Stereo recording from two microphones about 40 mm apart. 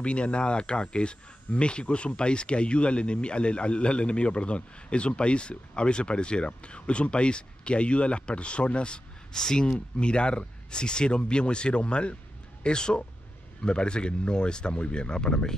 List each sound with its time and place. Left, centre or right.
0.0 s speech: left
9.3 s speech: centre
9.9 s speech: left